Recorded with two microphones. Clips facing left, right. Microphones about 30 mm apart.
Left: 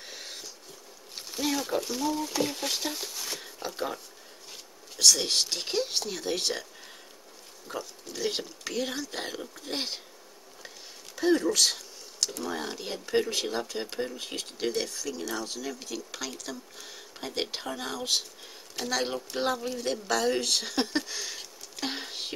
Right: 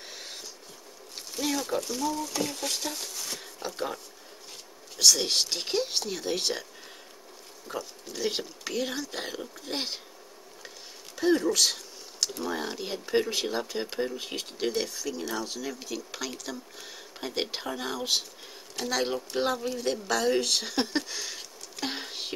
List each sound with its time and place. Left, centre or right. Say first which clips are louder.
0.1 s a sound: left 1 dB; centre
1.1 s speech: even; centre
7.6 s speech: right 1 dB; centre
11.1 s speech: even; centre